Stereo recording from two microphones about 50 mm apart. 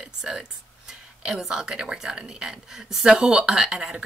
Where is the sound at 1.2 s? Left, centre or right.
Centre.